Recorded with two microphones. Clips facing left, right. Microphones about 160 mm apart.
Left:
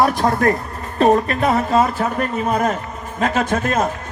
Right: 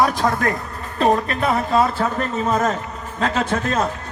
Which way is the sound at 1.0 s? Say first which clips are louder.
Left 3 dB; 40° left (ahead or behind).